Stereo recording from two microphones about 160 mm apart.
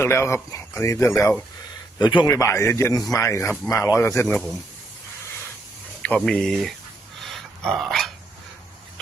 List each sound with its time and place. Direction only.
0.0 s speech: 15° left (ahead or behind)
2.0 s a man's voice: 25° left (ahead or behind); by 4.5 s 10° left (ahead or behind)
6.0 s speech: 5° left (ahead or behind)
7.2 s dog: centre (ahead or behind)